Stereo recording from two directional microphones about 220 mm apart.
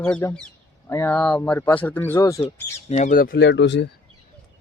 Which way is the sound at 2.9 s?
35° left (ahead or behind).